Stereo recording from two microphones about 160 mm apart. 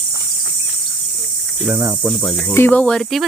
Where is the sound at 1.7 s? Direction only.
20° right (ahead or behind).